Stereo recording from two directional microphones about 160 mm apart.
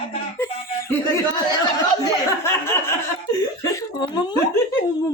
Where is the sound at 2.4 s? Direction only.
15° left (ahead or behind).